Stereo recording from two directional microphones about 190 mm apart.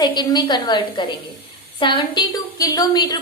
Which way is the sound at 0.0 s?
20° left (ahead or behind).